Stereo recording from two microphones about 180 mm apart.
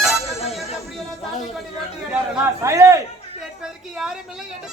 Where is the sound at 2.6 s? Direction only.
15° right (ahead or behind).